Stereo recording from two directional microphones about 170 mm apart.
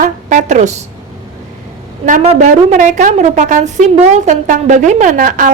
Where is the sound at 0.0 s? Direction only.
45° right (ahead or behind).